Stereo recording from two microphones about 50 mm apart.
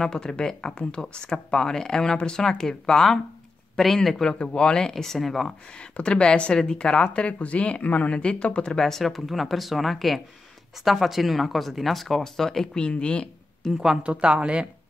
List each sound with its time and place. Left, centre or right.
0.0 s speech: centre
5.8 s speech: left
8.7 s speech: centre
13.6 s a woman's voice: centre
14.0 s speech: right